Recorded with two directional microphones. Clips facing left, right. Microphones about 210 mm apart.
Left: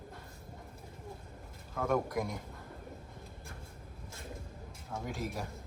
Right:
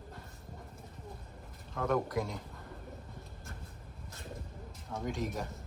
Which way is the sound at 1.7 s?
10° left (ahead or behind).